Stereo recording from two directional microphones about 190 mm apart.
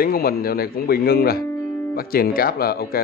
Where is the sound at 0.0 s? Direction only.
55° left (ahead or behind).